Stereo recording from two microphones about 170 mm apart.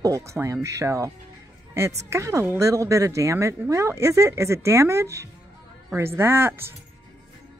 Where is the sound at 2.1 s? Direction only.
15° right (ahead or behind).